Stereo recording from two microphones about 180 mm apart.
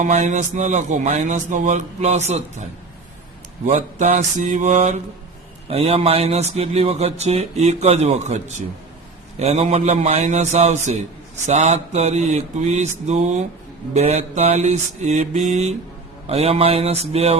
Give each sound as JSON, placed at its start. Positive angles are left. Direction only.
{"t": 0.0, "sound": "a man's voice", "side_deg": -40}
{"t": 3.7, "sound": "a man's voice", "side_deg": -40}
{"t": 9.4, "sound": "a man's voice", "side_deg": -35}